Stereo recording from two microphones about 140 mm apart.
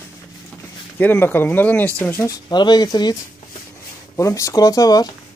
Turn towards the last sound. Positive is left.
turn(degrees=25)  # may be behind; listen again after turning